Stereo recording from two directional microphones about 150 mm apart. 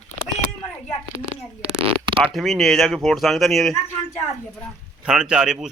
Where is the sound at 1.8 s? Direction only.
35° right (ahead or behind).